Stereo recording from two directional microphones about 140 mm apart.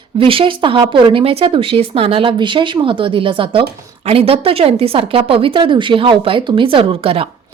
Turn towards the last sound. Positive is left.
turn(degrees=-40)  # may be behind; listen again after turning